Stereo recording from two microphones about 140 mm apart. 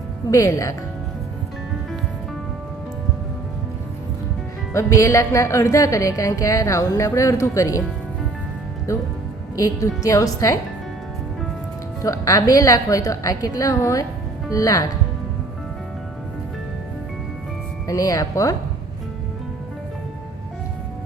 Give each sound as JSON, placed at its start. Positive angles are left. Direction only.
{"t": 0.3, "sound": "a woman's voice", "side_deg": 25}
{"t": 4.7, "sound": "a woman's voice", "side_deg": 20}
{"t": 8.9, "sound": "a woman's voice", "side_deg": 25}
{"t": 12.0, "sound": "a woman's voice", "side_deg": 25}
{"t": 17.8, "sound": "a woman's voice", "side_deg": 25}